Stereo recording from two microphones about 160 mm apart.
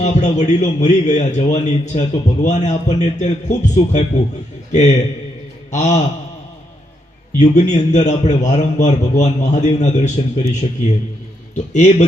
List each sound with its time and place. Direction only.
0.0 s a man's voice: 45° left (ahead or behind)
7.3 s a man's voice: 45° left (ahead or behind)